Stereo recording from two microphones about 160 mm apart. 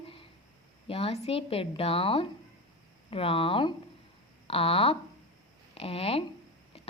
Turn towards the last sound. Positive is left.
turn(degrees=35)  # may be behind; listen again after turning